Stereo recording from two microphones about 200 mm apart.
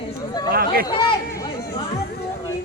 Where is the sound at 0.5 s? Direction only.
50° right (ahead or behind).